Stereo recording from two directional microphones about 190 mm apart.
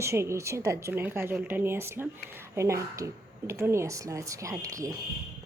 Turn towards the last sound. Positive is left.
turn(degrees=-15)  # may be behind; listen again after turning